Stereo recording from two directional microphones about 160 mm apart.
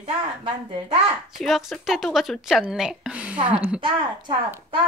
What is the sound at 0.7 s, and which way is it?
Speech, 35° right (ahead or behind).